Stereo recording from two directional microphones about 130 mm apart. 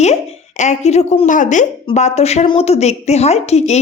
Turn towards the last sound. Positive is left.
turn(degrees=55)  # may be behind; listen again after turning